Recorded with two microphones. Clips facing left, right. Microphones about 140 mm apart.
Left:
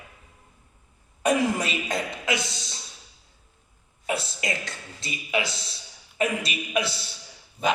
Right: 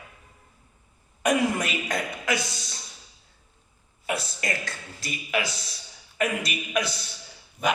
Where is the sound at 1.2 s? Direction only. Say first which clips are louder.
Left 1 dB; 30° left (ahead or behind).